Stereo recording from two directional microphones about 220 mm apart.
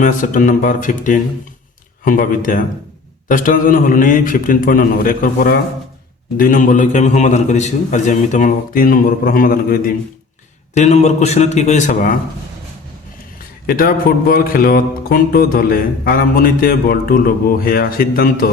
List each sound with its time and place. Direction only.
0.0 s speech: 35° left (ahead or behind)
13.7 s speech: 40° left (ahead or behind)